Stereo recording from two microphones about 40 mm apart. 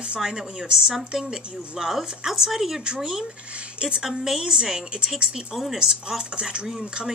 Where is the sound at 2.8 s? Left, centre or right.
Centre.